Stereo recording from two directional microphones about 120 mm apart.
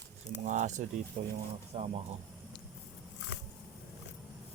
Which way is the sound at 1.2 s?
60° right (ahead or behind).